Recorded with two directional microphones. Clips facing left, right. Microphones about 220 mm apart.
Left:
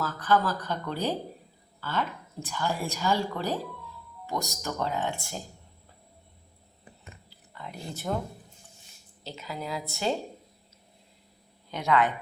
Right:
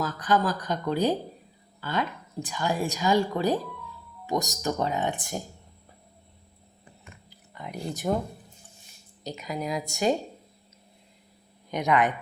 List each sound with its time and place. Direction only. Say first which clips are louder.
0.0 s speech: right 1 dB; 15° right (ahead or behind)
7.3 s a sound: right 4 dB; 15° right (ahead or behind)
9.2 s speech: right 5 dB; 15° right (ahead or behind)
11.7 s speech: right 1 dB; 15° right (ahead or behind)